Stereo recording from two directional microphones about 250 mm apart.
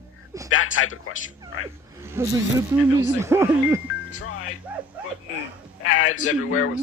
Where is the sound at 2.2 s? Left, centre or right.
Centre.